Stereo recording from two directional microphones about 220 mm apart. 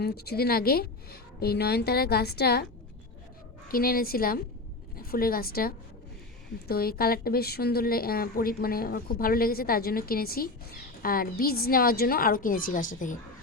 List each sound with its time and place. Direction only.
0.0 s a woman's voice: 45° left (ahead or behind)
3.7 s a woman's voice: 40° left (ahead or behind)